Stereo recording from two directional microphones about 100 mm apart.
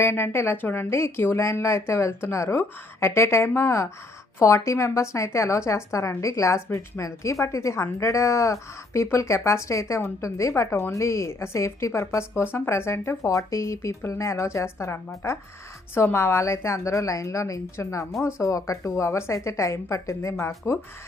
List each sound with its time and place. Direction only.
0.0 s a woman's voice: 25° left (ahead or behind)